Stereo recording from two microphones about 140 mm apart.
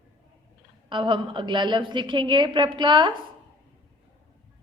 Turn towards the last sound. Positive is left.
turn(degrees=-35)  # may be behind; listen again after turning